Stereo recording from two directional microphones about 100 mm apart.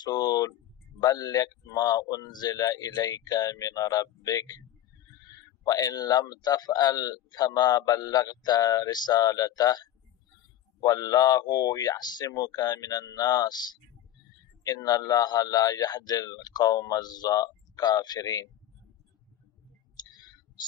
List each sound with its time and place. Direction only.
0.0 s speech: 45° left (ahead or behind)
5.7 s speech: 40° left (ahead or behind)
20.0 s a sound: 45° left (ahead or behind)